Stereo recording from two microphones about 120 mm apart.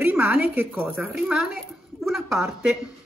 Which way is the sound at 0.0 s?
15° right (ahead or behind).